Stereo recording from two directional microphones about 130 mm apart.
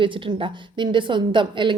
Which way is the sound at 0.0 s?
40° right (ahead or behind).